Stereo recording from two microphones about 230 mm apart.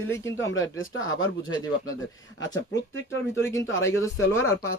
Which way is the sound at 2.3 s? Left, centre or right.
Left.